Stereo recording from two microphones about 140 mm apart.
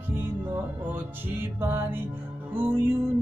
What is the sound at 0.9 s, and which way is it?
Music, 15° right (ahead or behind).